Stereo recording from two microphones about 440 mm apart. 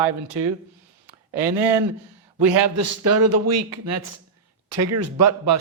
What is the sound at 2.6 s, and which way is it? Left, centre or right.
Speech, right.